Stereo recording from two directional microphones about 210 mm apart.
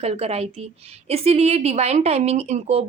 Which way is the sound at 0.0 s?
30° right (ahead or behind).